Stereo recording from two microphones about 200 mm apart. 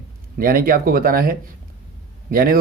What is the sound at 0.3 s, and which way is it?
Speech, 45° right (ahead or behind).